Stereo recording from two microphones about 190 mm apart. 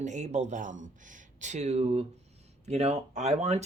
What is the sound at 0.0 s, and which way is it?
Speech, 40° right (ahead or behind).